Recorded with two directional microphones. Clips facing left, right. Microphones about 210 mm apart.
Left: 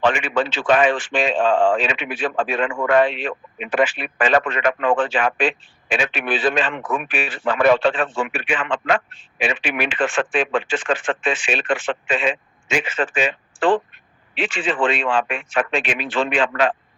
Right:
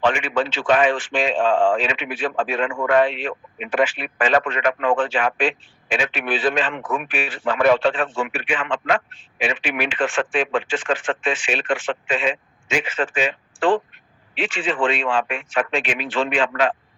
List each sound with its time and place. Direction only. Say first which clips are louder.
0.1 s a man's voice: left 1 dB; 75° left (ahead or behind)
2.6 s a man's voice: left 1 dB; 55° left (ahead or behind); by 9.0 s 75° left (ahead or behind)
9.4 s speech: left 1 dB; 90° left; by 16.7 s 75° left (ahead or behind)